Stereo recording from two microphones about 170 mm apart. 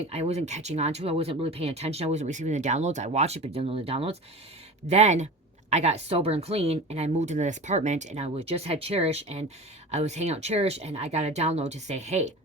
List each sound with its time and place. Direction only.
0.1 s speech: 40° right (ahead or behind)